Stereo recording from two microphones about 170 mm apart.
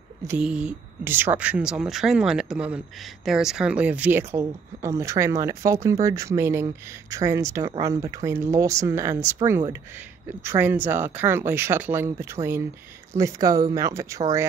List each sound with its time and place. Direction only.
0.4 s speech: 5° right (ahead or behind)